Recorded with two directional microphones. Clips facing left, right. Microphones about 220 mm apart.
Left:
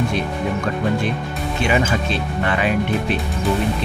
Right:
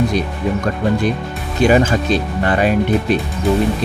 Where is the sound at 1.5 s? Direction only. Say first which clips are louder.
Right 7 dB; 40° right (ahead or behind).